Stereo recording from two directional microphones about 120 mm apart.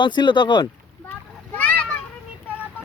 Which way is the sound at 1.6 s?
15° left (ahead or behind).